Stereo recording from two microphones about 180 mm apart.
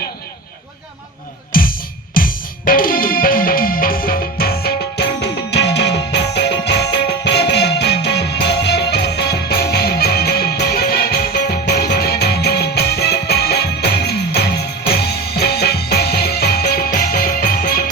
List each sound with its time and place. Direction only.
1.5 s music: 50° left (ahead or behind)